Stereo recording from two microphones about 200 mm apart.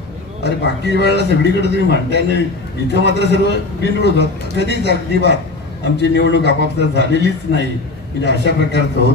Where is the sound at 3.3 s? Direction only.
60° left (ahead or behind).